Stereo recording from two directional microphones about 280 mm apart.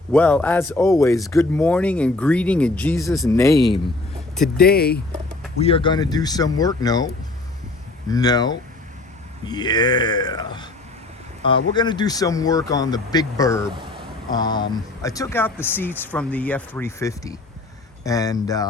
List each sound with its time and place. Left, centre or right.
0.1 s speech: centre
3.2 s speech: centre
4.6 s speech: left
5.6 s speech: centre
8.1 s speech: centre